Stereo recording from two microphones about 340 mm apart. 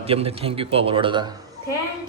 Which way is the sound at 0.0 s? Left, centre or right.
Centre.